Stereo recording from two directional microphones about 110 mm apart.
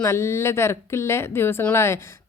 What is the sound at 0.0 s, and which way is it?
A woman's voice, 25° left (ahead or behind).